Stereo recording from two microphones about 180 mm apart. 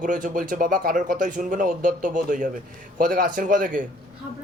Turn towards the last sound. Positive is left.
turn(degrees=-45)  # may be behind; listen again after turning